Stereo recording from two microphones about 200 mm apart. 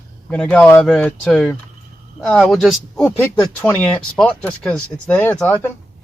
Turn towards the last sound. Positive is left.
turn(degrees=10)  # may be behind; listen again after turning